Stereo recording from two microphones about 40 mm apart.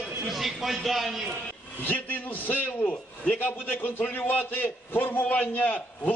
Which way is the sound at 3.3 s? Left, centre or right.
Left.